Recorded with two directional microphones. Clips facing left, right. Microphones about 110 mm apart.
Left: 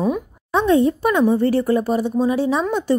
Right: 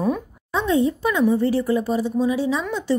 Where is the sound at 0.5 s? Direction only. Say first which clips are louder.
Left 4 dB; 60° left (ahead or behind).